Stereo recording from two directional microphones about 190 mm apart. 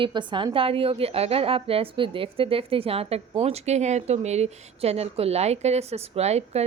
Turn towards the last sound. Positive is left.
turn(degrees=-35)  # may be behind; listen again after turning